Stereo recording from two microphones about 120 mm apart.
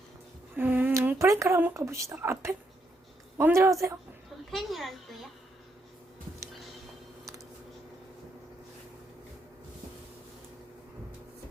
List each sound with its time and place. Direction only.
0.5 s a woman's voice: 15° right (ahead or behind)
4.5 s a child's voice: centre (ahead or behind)